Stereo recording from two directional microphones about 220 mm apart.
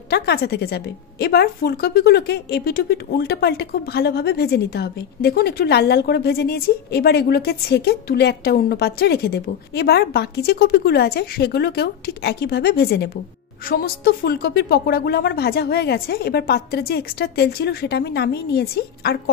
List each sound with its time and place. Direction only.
0.1 s a woman's voice: 50° left (ahead or behind)